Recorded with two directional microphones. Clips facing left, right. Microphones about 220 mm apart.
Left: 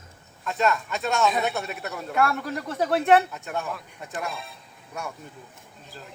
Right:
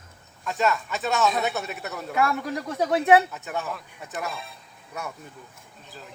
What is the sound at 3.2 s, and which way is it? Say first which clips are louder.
Speech: right 1 dB; centre (ahead or behind).